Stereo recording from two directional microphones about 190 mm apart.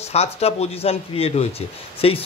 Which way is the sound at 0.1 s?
35° left (ahead or behind).